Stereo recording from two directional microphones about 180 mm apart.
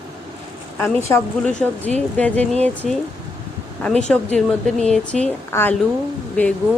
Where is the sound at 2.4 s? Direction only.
35° right (ahead or behind).